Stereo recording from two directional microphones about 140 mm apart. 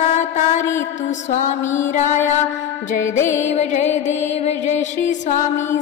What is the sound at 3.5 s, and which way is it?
Music, 55° left (ahead or behind).